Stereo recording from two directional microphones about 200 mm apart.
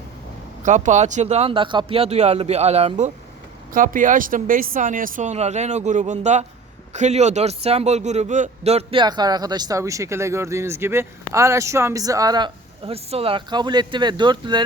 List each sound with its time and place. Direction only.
0.6 s a man's voice: 40° right (ahead or behind)